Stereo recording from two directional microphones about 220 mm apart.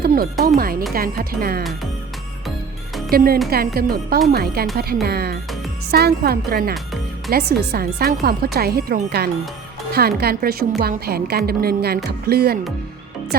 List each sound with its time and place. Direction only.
0.0 s speech: 40° right (ahead or behind)
3.1 s speech: 45° right (ahead or behind)